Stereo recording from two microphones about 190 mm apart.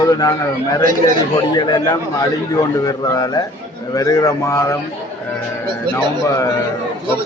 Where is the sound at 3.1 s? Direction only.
20° left (ahead or behind).